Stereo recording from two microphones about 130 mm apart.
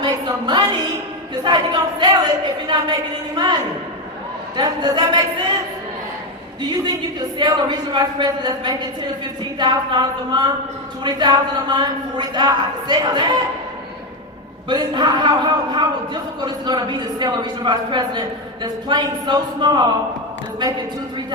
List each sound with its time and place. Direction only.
0.0 s a woman's voice: 35° right (ahead or behind)
4.5 s a man's voice: 30° right (ahead or behind)
6.6 s a man's voice: 35° right (ahead or behind)
14.7 s a man's voice: 35° right (ahead or behind)